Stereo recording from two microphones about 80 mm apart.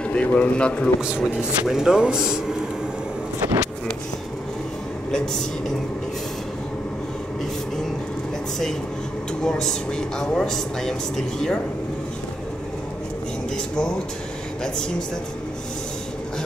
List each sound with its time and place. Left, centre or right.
0.1 s speech: centre
1.2 s speech: centre
5.1 s speech: centre
9.4 s speech: centre
13.7 s speech: centre